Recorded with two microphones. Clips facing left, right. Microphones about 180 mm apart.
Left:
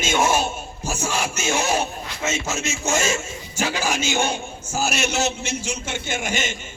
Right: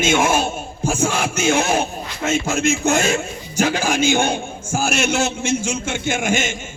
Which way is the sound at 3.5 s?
45° right (ahead or behind).